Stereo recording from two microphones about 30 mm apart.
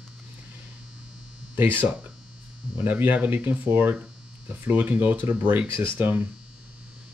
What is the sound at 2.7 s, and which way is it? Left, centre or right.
Speech, right.